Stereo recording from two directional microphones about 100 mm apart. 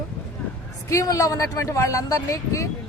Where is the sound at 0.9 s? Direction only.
35° left (ahead or behind).